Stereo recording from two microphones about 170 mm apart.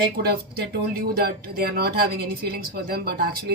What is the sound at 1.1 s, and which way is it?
A woman's voice, 65° right (ahead or behind).